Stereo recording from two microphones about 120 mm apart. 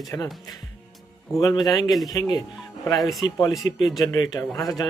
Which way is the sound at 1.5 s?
35° left (ahead or behind).